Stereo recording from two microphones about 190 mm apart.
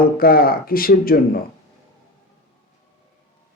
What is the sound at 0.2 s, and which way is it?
Speech, 50° left (ahead or behind).